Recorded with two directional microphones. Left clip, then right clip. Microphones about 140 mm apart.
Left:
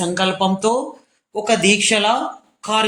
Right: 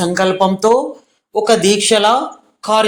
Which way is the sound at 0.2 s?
20° right (ahead or behind).